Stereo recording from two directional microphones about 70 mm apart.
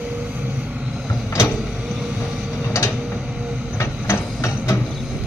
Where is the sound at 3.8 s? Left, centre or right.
Left.